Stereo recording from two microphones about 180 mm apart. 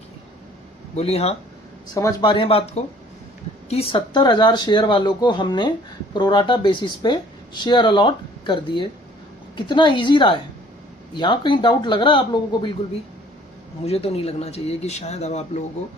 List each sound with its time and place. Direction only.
0.9 s speech: 35° left (ahead or behind)
2.0 s speech: 25° left (ahead or behind)
13.8 s speech: 35° left (ahead or behind)